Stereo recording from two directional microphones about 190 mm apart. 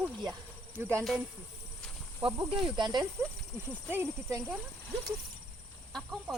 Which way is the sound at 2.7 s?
25° right (ahead or behind).